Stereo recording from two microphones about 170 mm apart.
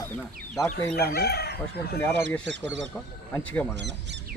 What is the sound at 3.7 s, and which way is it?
Speech, 90° right.